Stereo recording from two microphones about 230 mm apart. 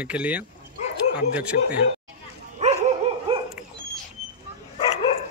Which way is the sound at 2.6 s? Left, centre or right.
Right.